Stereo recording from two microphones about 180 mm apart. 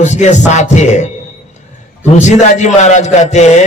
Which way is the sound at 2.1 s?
40° left (ahead or behind).